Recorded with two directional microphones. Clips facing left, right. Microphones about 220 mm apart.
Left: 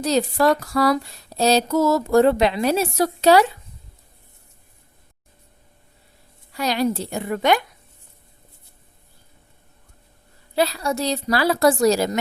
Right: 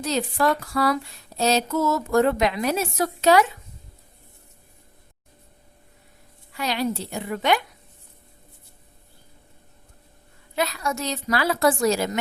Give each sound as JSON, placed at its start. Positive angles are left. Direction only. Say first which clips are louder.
{"t": 0.0, "sound": "speech", "louder": "left 4 dB", "side_deg": 40}
{"t": 6.5, "sound": "a woman's voice", "louder": "left 4 dB", "side_deg": 40}
{"t": 10.5, "sound": "speech", "louder": "left 5 dB", "side_deg": 35}